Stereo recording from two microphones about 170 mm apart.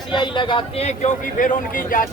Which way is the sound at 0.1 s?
25° left (ahead or behind).